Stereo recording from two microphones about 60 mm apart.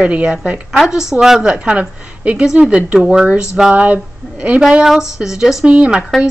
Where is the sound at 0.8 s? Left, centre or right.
Centre.